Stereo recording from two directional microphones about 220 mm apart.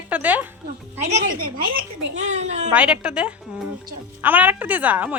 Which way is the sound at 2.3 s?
30° right (ahead or behind).